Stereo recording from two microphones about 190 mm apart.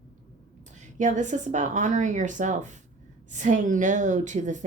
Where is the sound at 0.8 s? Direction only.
40° right (ahead or behind).